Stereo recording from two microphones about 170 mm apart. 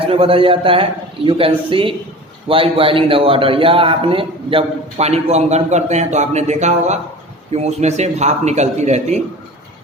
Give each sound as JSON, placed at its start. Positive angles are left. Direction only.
{"t": 0.1, "sound": "a man's voice", "side_deg": -30}